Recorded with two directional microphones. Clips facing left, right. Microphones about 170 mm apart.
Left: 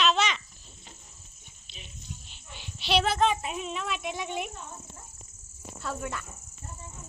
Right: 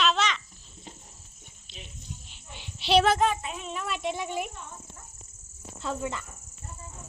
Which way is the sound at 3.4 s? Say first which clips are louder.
Left 2 dB; 25° left (ahead or behind).